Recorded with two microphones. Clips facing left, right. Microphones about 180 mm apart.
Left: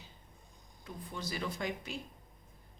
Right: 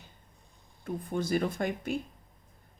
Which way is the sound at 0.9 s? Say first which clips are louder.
Right 11 dB; 50° right (ahead or behind).